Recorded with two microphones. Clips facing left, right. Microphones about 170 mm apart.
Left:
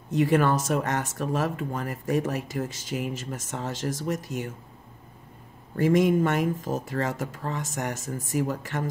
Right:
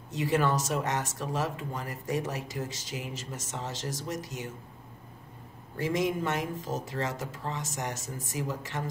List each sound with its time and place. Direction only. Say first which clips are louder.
0.1 s speech: left 5 dB; 55° left (ahead or behind)
5.8 s speech: left 8 dB; 55° left (ahead or behind)